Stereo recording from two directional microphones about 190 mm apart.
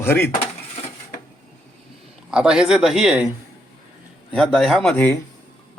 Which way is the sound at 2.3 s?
5° right (ahead or behind).